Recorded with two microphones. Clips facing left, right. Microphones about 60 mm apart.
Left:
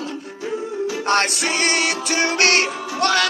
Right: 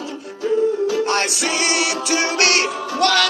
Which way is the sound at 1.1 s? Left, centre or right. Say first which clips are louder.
Left 1 dB; left.